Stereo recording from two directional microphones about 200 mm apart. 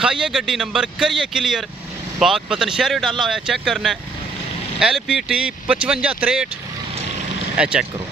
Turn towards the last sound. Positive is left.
turn(degrees=-5)  # may be behind; listen again after turning